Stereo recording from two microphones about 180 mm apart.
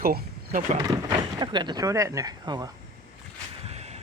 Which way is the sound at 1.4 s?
25° right (ahead or behind).